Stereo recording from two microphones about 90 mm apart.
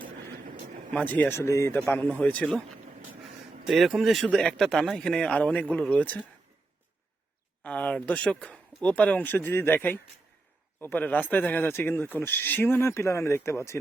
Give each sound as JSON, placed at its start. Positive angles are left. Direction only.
{"t": 0.9, "sound": "speech", "side_deg": 20}
{"t": 3.7, "sound": "speech", "side_deg": 0}
{"t": 7.6, "sound": "speech", "side_deg": 15}